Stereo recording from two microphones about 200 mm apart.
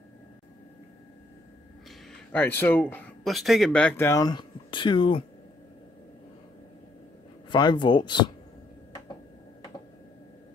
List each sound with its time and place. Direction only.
1.9 s speech: 10° left (ahead or behind); by 5.2 s 25° left (ahead or behind)
7.4 s speech: 25° left (ahead or behind)